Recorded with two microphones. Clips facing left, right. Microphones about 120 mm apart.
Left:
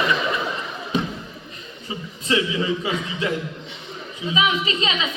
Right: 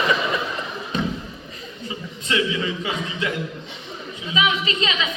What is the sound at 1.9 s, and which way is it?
A man's voice, 30° left (ahead or behind).